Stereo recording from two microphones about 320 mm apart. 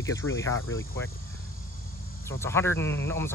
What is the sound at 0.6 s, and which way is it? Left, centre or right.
Speech, left.